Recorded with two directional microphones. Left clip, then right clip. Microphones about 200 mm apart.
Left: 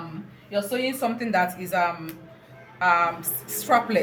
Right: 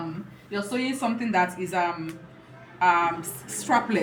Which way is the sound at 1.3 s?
40° left (ahead or behind).